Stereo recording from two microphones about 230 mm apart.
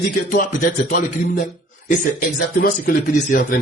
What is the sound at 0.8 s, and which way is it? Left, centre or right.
A man's voice, left.